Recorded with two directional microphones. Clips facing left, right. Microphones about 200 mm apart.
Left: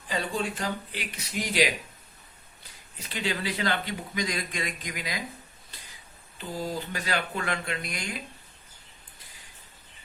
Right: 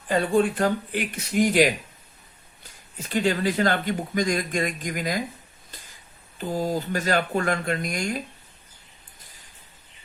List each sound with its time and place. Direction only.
0.1 s speech: 55° right (ahead or behind)
3.0 s speech: 45° right (ahead or behind)
6.4 s speech: 45° right (ahead or behind)